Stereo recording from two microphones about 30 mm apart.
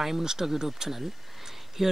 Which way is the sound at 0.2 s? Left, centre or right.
Centre.